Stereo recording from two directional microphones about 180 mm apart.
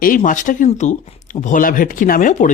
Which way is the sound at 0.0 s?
50° left (ahead or behind).